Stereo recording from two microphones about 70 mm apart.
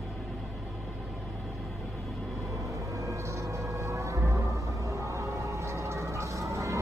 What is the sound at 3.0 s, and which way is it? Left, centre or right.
Music, right.